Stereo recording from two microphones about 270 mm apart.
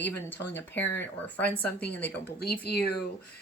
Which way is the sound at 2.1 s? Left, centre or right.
Left.